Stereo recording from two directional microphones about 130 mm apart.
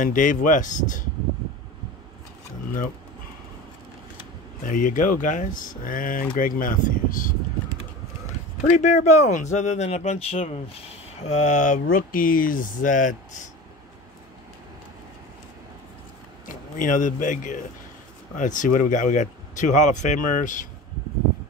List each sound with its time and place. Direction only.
0.0 s speech: 90° left
4.6 s speech: 90° left
8.5 s speech: 60° left (ahead or behind)
11.2 s speech: 65° left (ahead or behind); by 13.5 s 85° left
16.4 s speech: 90° left